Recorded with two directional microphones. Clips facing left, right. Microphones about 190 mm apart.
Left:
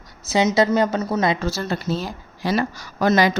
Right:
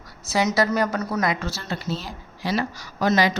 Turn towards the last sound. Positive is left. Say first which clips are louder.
# left 3 dB
turn(degrees=50)  # may be behind; listen again after turning